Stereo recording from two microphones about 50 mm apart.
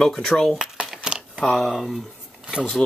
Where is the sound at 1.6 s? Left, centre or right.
Centre.